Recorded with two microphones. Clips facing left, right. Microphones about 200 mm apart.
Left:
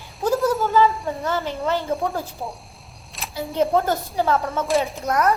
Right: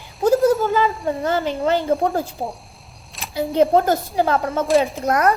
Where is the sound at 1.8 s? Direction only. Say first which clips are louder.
Right 5 dB; 50° right (ahead or behind).